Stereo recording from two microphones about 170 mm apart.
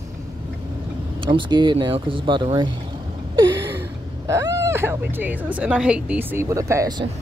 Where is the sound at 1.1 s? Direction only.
30° right (ahead or behind).